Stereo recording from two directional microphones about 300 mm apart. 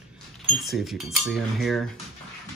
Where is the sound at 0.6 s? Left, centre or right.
Centre.